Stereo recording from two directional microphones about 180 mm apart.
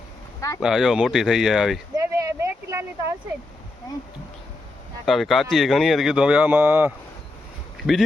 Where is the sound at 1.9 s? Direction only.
15° right (ahead or behind).